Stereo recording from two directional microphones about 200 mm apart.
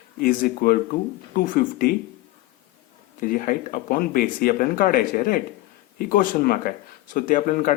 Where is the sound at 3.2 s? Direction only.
40° left (ahead or behind).